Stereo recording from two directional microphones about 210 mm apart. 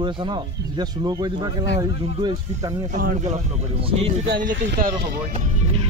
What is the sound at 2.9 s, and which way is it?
Speech, 35° right (ahead or behind).